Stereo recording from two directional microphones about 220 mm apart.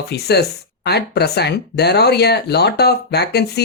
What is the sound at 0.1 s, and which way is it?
Speech, 50° left (ahead or behind).